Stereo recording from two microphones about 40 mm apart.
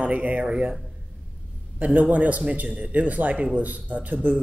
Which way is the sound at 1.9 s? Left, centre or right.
Right.